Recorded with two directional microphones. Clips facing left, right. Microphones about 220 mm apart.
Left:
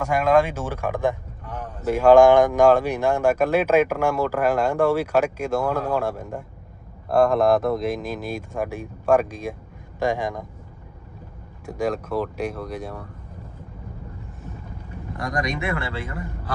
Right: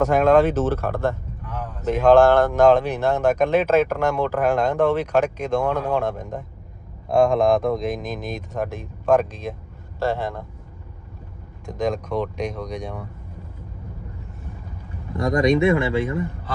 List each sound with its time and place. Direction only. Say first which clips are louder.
0.0 s speech: right 3 dB; 10° left (ahead or behind)
11.6 s speech: right 1 dB; 10° left (ahead or behind)
15.3 s speech: right 10 dB; 25° right (ahead or behind)